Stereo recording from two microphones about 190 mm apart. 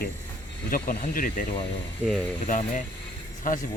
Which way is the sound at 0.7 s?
50° left (ahead or behind).